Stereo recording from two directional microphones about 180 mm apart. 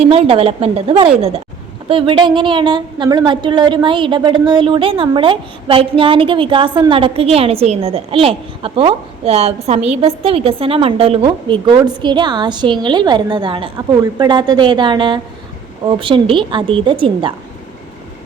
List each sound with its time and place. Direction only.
0.0 s a woman's voice: 30° right (ahead or behind)